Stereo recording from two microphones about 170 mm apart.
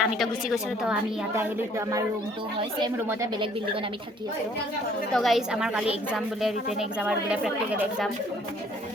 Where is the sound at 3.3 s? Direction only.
30° right (ahead or behind).